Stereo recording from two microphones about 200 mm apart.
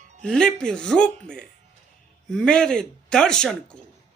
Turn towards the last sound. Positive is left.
turn(degrees=5)  # may be behind; listen again after turning